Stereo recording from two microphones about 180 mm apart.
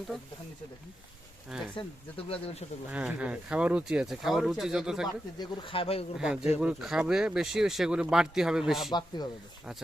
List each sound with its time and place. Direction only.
1.5 s speech: 5° right (ahead or behind)
2.2 s speech: 30° left (ahead or behind)
2.9 s speech: 10° right (ahead or behind)
5.4 s speech: 30° left (ahead or behind)
6.1 s speech: 5° right (ahead or behind)
8.9 s speech: 25° left (ahead or behind)